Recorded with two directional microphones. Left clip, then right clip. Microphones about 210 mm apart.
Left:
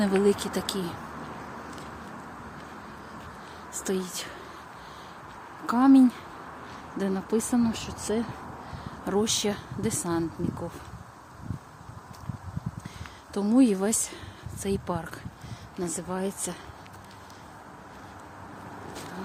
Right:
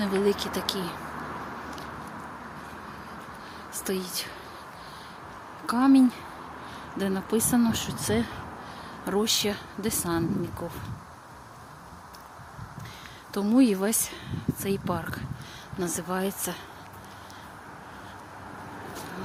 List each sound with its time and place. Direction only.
0.2 s speech: 20° left (ahead or behind)
3.8 s speech: 15° left (ahead or behind)
5.6 s speech: 15° left (ahead or behind); by 8.3 s centre (ahead or behind)
9.0 s speech: 10° left (ahead or behind)
13.3 s speech: 5° left (ahead or behind)